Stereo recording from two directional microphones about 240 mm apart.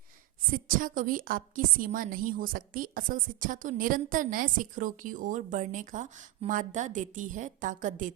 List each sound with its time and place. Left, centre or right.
0.8 s a woman's voice: right